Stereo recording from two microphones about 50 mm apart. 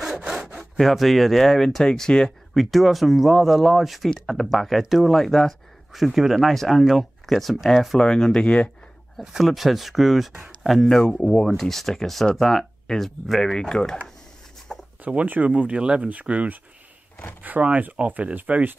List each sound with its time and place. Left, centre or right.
0.2 s sawing: centre
0.7 s speech: centre
2.5 s speech: centre
5.9 s speech: centre
8.0 s speech: centre
9.2 s speech: centre
10.9 s speech: centre
14.7 s a sound: centre
15.2 s speech: right